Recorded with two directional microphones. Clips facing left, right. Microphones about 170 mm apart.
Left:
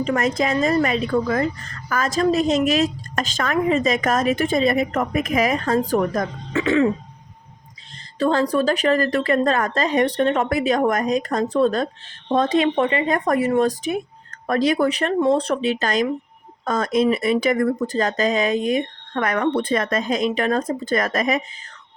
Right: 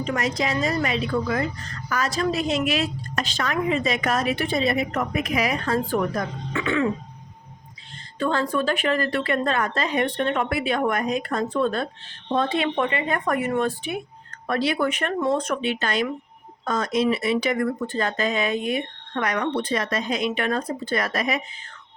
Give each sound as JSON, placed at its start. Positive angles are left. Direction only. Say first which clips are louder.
{"t": 0.0, "sound": "a woman's voice", "louder": "left 4 dB", "side_deg": 50}
{"t": 8.2, "sound": "speech", "louder": "left 5 dB", "side_deg": 35}
{"t": 16.6, "sound": "a woman's voice", "louder": "left 3 dB", "side_deg": 50}